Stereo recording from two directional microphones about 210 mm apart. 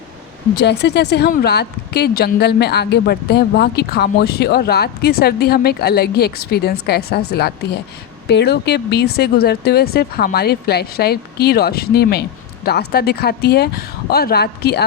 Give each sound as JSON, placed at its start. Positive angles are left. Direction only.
{"t": 0.5, "sound": "speech", "side_deg": 55}